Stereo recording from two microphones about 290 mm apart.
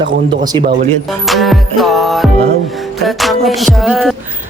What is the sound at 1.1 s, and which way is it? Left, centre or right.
Music, centre.